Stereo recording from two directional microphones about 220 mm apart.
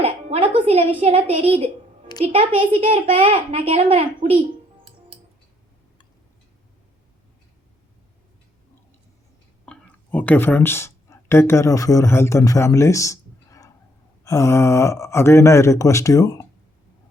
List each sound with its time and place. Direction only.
0.0 s music: 25° right (ahead or behind)
1.0 s a child's voice: 30° right (ahead or behind)
9.6 s speech: 5° left (ahead or behind)